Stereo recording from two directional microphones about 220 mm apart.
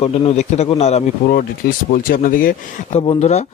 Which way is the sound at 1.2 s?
40° left (ahead or behind).